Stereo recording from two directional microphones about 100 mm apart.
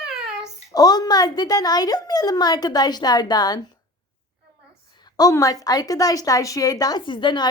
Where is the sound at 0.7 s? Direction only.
40° left (ahead or behind).